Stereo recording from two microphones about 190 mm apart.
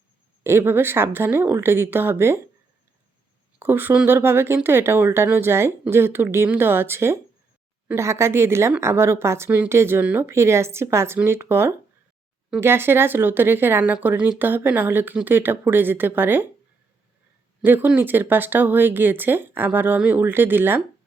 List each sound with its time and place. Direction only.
0.4 s speech: 10° right (ahead or behind)
3.6 s speech: 10° right (ahead or behind)
17.6 s speech: 10° right (ahead or behind)